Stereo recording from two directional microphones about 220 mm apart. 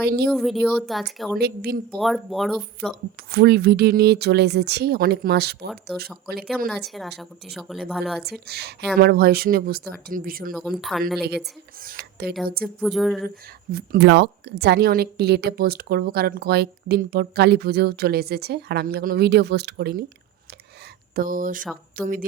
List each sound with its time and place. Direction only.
0.0 s a woman's voice: 45° right (ahead or behind)
0.3 s speech: centre (ahead or behind)
1.4 s a woman's voice: 45° right (ahead or behind)
2.0 s speech: centre (ahead or behind)
3.3 s a woman's voice: 45° right (ahead or behind)
5.6 s speech: centre (ahead or behind)
8.2 s a woman's voice: 45° right (ahead or behind)
10.5 s speech: centre (ahead or behind)
11.2 s speech: 50° right (ahead or behind)
12.6 s speech: centre (ahead or behind)
13.7 s a woman's voice: 45° right (ahead or behind)
21.2 s a sound: 40° right (ahead or behind)